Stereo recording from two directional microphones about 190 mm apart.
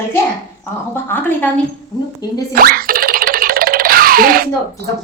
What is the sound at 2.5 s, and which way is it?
Music, 50° right (ahead or behind).